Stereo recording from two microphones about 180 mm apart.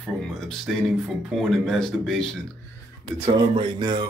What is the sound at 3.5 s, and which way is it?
Speech, 25° right (ahead or behind).